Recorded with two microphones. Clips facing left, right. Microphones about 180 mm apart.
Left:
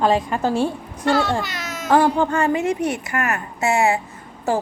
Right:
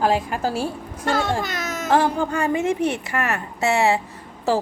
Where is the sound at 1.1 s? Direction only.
50° right (ahead or behind).